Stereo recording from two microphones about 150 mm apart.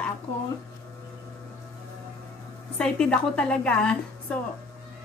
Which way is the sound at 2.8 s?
5° left (ahead or behind).